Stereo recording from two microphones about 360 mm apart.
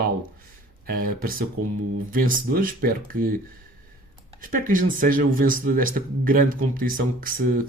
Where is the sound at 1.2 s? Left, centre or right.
Right.